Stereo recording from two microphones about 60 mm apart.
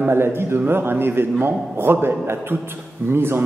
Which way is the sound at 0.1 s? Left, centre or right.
Right.